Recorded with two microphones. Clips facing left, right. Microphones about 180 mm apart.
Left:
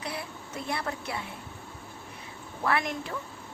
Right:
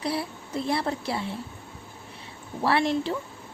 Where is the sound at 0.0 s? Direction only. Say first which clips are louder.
Right 7 dB; 35° right (ahead or behind).